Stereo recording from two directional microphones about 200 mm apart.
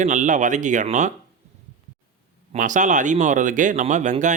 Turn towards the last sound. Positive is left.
turn(degrees=-40)  # may be behind; listen again after turning